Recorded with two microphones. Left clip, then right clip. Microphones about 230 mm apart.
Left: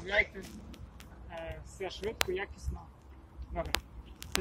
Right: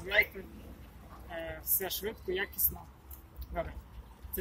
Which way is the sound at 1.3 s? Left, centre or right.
Centre.